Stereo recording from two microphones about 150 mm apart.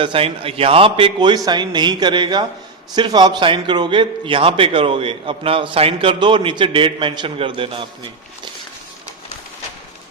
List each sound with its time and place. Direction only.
0.0 s a man's voice: 40° right (ahead or behind)